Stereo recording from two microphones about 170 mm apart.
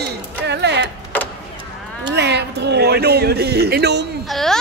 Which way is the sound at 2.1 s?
80° right.